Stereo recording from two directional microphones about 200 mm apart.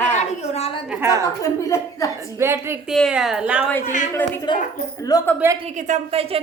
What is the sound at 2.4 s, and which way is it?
Speech, 10° right (ahead or behind).